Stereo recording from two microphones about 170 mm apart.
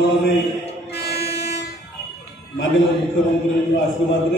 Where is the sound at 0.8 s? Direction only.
75° left (ahead or behind).